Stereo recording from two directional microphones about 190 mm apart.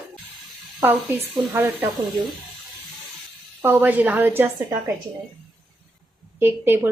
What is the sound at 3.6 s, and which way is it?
Speech, 10° right (ahead or behind).